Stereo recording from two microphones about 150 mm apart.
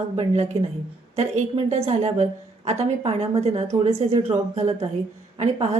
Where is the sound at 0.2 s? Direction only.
45° right (ahead or behind).